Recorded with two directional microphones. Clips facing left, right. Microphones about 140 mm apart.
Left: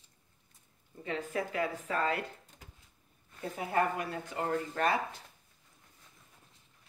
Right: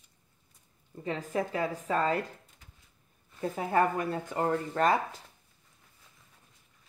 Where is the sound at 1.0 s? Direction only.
35° right (ahead or behind).